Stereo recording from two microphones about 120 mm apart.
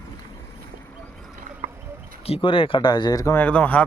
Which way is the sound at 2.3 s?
50° left (ahead or behind).